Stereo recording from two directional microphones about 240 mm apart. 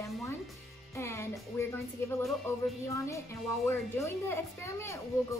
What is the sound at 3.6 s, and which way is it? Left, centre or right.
A woman's voice, centre.